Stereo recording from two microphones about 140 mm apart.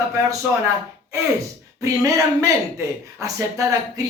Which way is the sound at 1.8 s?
25° right (ahead or behind).